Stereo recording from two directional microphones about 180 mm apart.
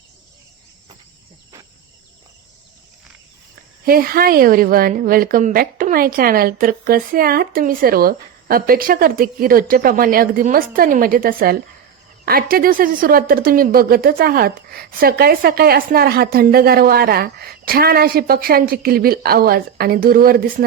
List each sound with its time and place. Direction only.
3.8 s a woman's voice: 55° right (ahead or behind)